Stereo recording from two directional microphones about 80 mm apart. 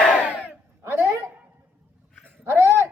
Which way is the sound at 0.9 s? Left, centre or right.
Right.